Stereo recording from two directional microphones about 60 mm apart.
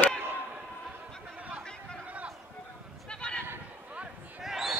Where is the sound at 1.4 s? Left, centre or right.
Right.